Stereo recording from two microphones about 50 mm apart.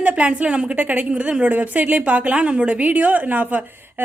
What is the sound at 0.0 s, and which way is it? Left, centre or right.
A woman's voice, right.